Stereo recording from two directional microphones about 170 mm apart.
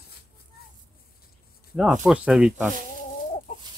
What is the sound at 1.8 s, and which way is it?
Speech, 5° right (ahead or behind).